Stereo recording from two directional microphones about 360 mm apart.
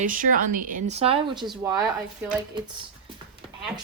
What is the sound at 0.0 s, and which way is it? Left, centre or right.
Speech, right.